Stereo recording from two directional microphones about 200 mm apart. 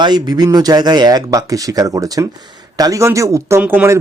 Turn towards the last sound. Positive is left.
turn(degrees=-10)  # may be behind; listen again after turning